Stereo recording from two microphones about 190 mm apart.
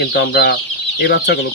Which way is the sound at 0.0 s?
60° left (ahead or behind).